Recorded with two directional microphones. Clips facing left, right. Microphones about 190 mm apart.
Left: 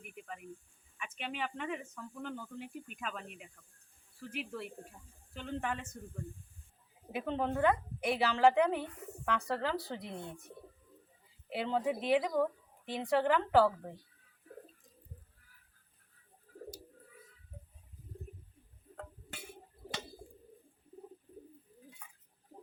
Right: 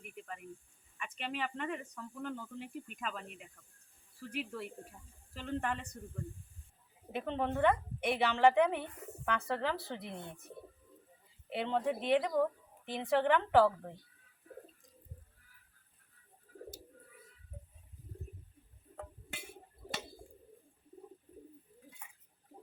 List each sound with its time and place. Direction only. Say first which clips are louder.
0.0 s snake: even; centre (ahead or behind)
0.9 s a woman's voice: right 1 dB; centre (ahead or behind)
7.1 s a woman's voice: left 1 dB; 5° left (ahead or behind)
11.4 s a woman's voice: even; centre (ahead or behind)
18.9 s a sound: right 1 dB; 5° right (ahead or behind)